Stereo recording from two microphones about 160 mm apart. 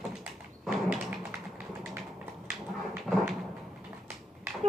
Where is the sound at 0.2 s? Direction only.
10° right (ahead or behind).